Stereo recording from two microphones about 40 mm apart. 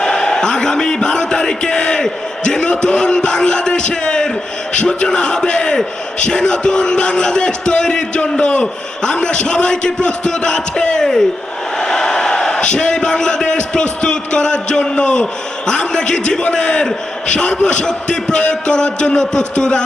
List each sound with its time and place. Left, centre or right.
0.0 s a sound: centre
4.7 s a man's voice: left
11.0 s a man's voice: centre